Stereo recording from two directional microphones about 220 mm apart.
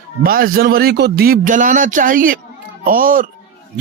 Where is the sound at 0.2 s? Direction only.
40° right (ahead or behind).